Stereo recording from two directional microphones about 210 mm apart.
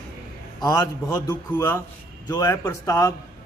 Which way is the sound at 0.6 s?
20° left (ahead or behind).